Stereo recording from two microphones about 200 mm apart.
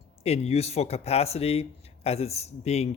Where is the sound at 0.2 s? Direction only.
30° left (ahead or behind).